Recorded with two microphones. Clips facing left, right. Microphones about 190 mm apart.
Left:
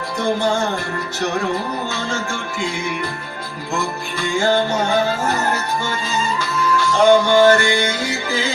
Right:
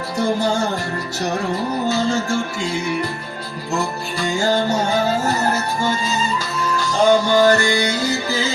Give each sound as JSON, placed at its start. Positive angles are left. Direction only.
{"t": 3.8, "sound": "music", "side_deg": -40}
{"t": 5.8, "sound": "music", "side_deg": -40}